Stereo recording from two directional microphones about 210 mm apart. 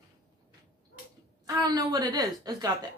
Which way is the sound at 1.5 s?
15° right (ahead or behind).